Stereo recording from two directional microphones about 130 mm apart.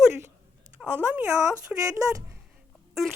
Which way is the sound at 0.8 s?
15° right (ahead or behind).